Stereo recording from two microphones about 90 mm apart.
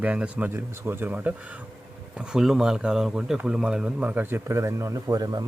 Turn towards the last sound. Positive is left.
turn(degrees=-40)  # may be behind; listen again after turning